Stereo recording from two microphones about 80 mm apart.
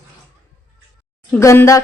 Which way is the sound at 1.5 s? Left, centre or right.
Left.